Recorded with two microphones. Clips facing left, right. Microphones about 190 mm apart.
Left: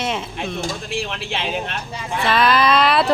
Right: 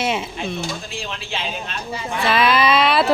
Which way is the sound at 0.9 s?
65° left (ahead or behind).